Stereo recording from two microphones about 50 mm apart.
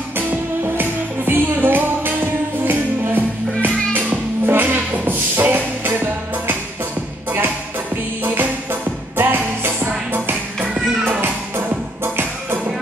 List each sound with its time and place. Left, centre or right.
0.3 s music: right
9.1 s music: right
11.5 s music: right